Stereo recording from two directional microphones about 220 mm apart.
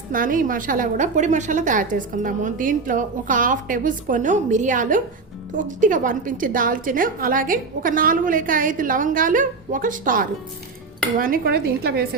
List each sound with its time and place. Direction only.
0.1 s a woman's voice: 40° right (ahead or behind)